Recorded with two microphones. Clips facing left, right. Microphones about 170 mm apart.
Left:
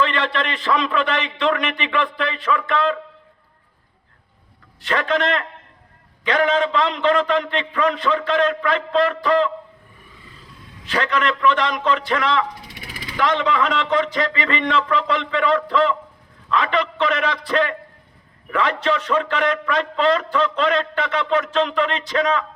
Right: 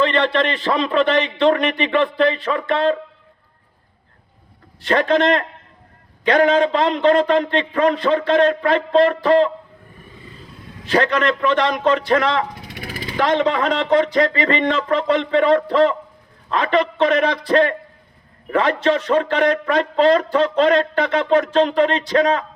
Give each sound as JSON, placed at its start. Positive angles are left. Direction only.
{"t": 0.0, "sound": "a man's voice", "side_deg": -40}
{"t": 4.8, "sound": "a man's voice", "side_deg": -40}
{"t": 10.8, "sound": "a man's voice", "side_deg": -40}
{"t": 12.6, "sound": "vehicle", "side_deg": -50}
{"t": 13.0, "sound": "a man's voice", "side_deg": -35}